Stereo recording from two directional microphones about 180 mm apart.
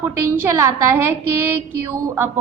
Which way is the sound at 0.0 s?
15° right (ahead or behind).